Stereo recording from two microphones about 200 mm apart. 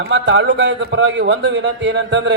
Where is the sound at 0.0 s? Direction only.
65° right (ahead or behind).